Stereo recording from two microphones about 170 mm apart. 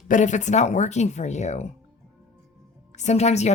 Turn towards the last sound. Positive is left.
turn(degrees=40)  # may be behind; listen again after turning